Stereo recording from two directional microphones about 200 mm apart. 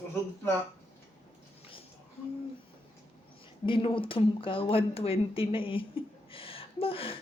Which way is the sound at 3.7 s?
25° left (ahead or behind).